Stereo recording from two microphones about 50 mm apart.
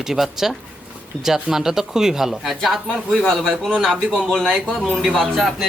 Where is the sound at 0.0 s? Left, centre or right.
Centre.